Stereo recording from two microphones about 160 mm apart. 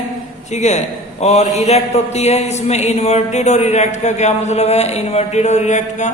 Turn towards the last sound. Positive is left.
turn(degrees=45)  # may be behind; listen again after turning